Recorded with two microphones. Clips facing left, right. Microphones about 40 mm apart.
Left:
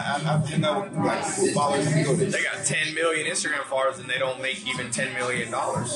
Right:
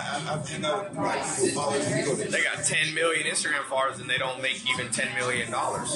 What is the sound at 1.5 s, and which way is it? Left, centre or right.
Speech, left.